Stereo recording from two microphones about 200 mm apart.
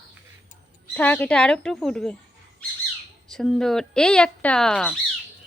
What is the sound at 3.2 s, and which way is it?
Speech, centre (ahead or behind).